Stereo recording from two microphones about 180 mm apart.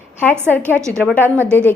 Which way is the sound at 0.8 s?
15° right (ahead or behind).